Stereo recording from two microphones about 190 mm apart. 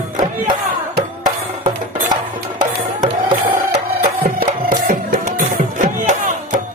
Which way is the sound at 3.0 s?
45° right (ahead or behind).